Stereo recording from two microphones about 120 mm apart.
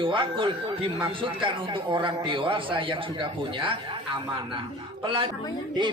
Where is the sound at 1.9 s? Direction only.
45° right (ahead or behind).